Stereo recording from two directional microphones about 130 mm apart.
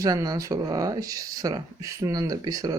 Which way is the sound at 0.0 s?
30° right (ahead or behind).